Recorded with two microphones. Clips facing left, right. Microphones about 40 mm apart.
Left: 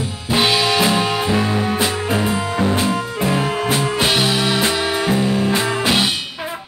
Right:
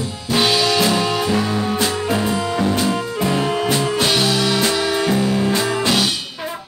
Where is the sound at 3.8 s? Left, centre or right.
Centre.